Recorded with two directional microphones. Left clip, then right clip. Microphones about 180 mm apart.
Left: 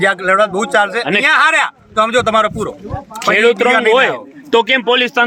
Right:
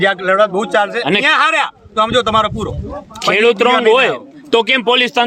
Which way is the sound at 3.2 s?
75° right (ahead or behind).